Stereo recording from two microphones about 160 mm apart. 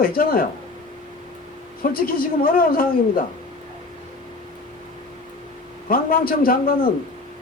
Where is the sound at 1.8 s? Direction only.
65° left (ahead or behind).